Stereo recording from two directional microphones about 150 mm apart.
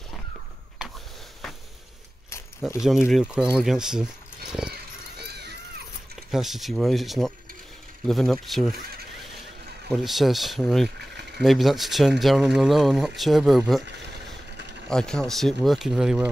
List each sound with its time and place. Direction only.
2.6 s speech: centre (ahead or behind)
4.5 s horse: 5° right (ahead or behind)
5.2 s run: 90° right
6.3 s speech: centre (ahead or behind)
9.9 s speech: centre (ahead or behind)
14.9 s speech: 5° left (ahead or behind)